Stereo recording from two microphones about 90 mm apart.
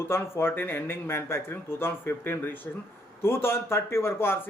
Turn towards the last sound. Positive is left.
turn(degrees=25)  # may be behind; listen again after turning